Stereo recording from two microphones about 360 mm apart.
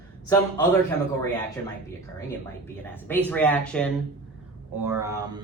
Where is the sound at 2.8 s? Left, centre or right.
Centre.